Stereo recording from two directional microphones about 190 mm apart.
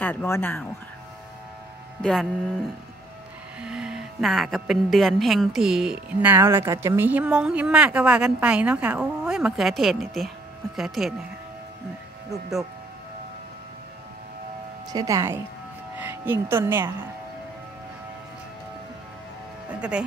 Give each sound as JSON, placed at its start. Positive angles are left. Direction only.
{"t": 0.0, "sound": "speech", "side_deg": 10}
{"t": 2.0, "sound": "speech", "side_deg": 5}
{"t": 3.6, "sound": "a woman's voice", "side_deg": -5}
{"t": 14.9, "sound": "speech", "side_deg": -20}
{"t": 19.7, "sound": "a woman's voice", "side_deg": -5}